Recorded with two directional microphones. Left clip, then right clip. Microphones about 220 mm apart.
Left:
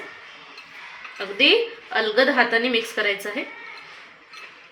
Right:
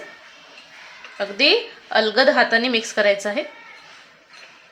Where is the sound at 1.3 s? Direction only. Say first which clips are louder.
Even; 70° right (ahead or behind).